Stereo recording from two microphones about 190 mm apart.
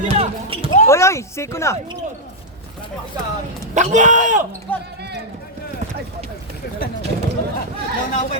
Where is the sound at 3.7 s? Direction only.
40° right (ahead or behind).